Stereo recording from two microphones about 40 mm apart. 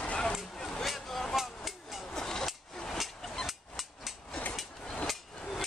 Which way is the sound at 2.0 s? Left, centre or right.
Centre.